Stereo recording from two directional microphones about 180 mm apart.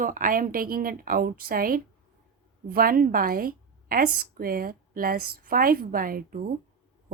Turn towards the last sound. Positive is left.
turn(degrees=-50)  # may be behind; listen again after turning